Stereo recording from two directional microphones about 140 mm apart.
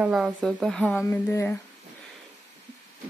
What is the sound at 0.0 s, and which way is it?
Speech, 5° right (ahead or behind).